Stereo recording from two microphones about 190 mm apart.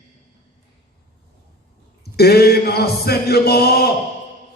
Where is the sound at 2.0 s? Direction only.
55° left (ahead or behind).